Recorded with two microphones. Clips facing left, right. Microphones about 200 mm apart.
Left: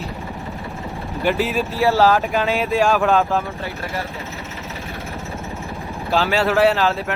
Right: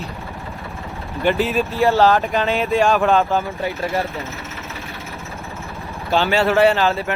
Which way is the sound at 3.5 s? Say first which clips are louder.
Right 5 dB; 15° right (ahead or behind).